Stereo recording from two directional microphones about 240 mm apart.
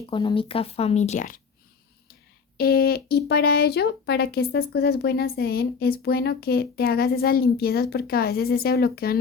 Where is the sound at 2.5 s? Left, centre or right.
Left.